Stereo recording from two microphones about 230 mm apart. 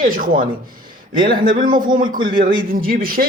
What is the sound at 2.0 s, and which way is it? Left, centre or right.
Speech, centre.